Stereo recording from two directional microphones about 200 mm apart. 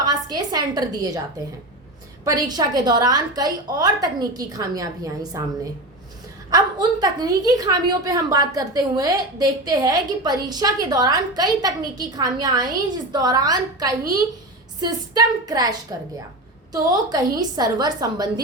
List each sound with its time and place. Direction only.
0.0 s a woman's voice: 20° right (ahead or behind)
2.2 s a woman's voice: 20° right (ahead or behind)
6.5 s a woman's voice: 20° right (ahead or behind)